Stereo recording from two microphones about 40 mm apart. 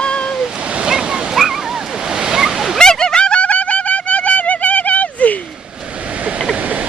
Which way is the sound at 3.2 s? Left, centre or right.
Left.